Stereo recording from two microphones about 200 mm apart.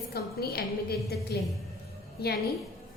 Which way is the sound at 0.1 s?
50° left (ahead or behind).